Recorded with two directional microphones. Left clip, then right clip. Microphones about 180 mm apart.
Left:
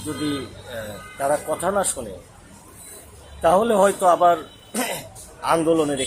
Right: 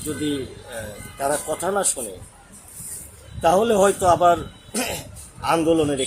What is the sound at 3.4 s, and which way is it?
Speech, 15° right (ahead or behind).